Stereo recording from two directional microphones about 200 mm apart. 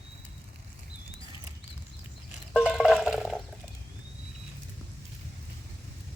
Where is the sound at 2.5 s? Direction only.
Centre (ahead or behind).